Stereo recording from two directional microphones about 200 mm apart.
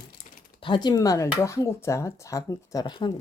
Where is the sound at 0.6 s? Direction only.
20° left (ahead or behind).